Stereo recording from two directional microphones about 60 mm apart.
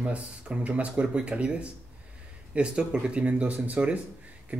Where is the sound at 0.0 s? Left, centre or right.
Right.